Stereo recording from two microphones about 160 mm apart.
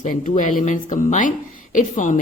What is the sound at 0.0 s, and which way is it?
A man's voice, 50° left (ahead or behind).